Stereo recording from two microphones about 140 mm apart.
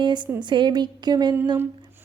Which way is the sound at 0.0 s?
30° right (ahead or behind).